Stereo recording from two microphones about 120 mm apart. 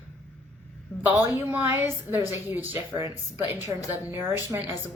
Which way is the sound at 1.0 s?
15° right (ahead or behind).